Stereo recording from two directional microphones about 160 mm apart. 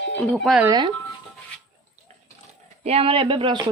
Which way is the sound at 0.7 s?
30° right (ahead or behind).